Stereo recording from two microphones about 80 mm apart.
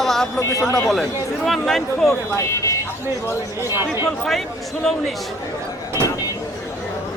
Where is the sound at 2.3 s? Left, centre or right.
Left.